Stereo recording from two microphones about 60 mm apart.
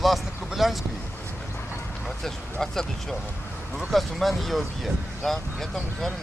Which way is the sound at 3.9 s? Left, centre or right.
Centre.